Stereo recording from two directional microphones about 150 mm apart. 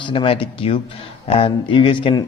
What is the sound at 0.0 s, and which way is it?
Speech, 35° left (ahead or behind).